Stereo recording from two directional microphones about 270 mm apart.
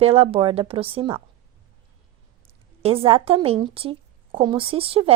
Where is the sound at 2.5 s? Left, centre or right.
Right.